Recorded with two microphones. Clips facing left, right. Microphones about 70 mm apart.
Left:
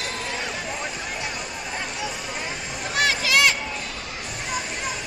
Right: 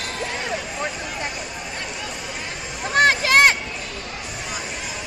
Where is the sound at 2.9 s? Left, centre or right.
Right.